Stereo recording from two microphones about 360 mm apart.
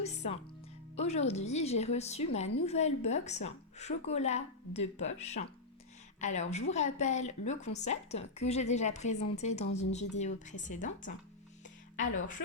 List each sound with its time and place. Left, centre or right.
0.0 s music: centre
0.9 s a woman's voice: centre